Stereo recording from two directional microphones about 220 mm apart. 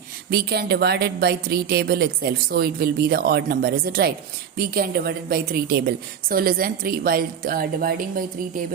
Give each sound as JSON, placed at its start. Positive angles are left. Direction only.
{"t": 0.3, "sound": "a woman's voice", "side_deg": -45}